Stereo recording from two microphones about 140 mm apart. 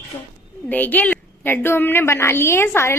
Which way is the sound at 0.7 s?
10° left (ahead or behind).